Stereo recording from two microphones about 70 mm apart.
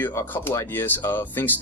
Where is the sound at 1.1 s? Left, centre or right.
Left.